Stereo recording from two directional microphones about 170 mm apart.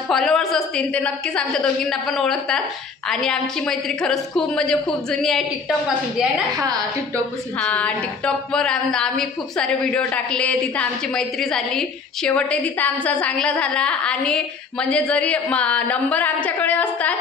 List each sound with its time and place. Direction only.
0.1 s a woman's voice: centre (ahead or behind)
6.5 s a woman's voice: 25° right (ahead or behind)
7.6 s a woman's voice: 5° left (ahead or behind)